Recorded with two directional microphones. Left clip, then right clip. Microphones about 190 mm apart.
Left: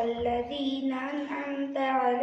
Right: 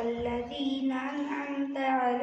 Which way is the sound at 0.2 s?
10° right (ahead or behind).